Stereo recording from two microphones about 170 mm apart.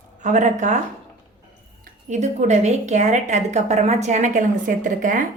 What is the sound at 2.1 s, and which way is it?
A woman's voice, 40° right (ahead or behind).